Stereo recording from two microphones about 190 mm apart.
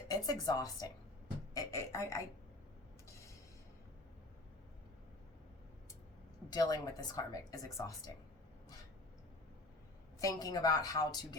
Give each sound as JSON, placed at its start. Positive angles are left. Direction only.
{"t": 0.1, "sound": "speech", "side_deg": 20}
{"t": 1.5, "sound": "beatboxing", "side_deg": 15}
{"t": 6.5, "sound": "a woman's voice", "side_deg": 20}
{"t": 10.2, "sound": "a woman's voice", "side_deg": 20}